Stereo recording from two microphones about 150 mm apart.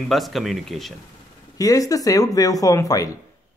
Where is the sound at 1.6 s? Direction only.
25° left (ahead or behind).